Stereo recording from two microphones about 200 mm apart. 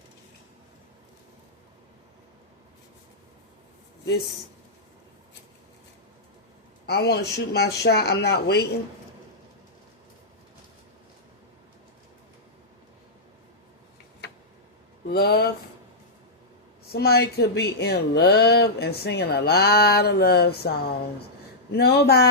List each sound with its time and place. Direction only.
6.8 s speech: 55° left (ahead or behind)
15.1 s speech: 50° left (ahead or behind)
16.8 s speech: 50° left (ahead or behind)